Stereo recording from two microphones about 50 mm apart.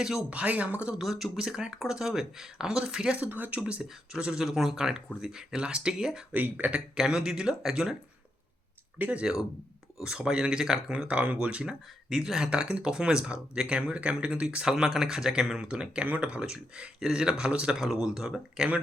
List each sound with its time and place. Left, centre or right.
0.0 s speech: centre
0.3 s speech: right
0.9 s speech: centre
3.2 s speech: right; by 6.2 s centre
6.3 s speech: right
6.9 s speech: centre
9.0 s speech: right
10.0 s speech: centre
16.0 s speech: right
16.5 s speech: centre